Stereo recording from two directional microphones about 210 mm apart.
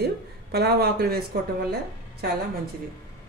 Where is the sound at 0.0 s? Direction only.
50° right (ahead or behind).